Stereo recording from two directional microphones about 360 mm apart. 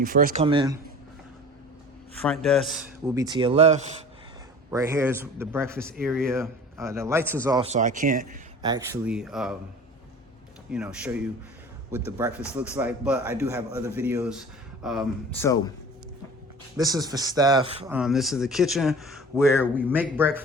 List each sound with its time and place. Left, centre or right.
0.0 s speech: right
2.1 s speech: centre
3.2 s speech: centre
8.7 s speech: centre
10.7 s speech: centre
16.7 s speech: centre
17.9 s speech: centre